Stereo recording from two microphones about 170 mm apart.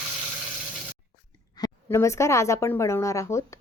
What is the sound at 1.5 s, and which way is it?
Speech, 20° left (ahead or behind).